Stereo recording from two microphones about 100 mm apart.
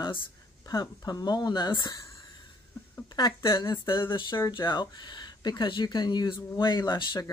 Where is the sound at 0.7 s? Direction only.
40° left (ahead or behind).